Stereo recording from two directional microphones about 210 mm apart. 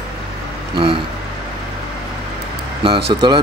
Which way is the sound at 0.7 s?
25° right (ahead or behind).